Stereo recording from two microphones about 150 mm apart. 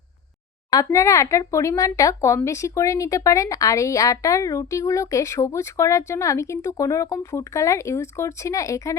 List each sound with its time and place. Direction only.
0.7 s speech: 20° left (ahead or behind)